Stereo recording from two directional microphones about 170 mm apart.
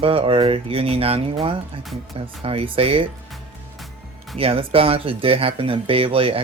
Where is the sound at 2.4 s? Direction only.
35° right (ahead or behind).